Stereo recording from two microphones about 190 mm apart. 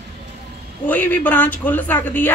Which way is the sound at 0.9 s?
10° left (ahead or behind).